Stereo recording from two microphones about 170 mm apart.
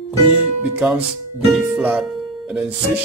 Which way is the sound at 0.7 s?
10° right (ahead or behind).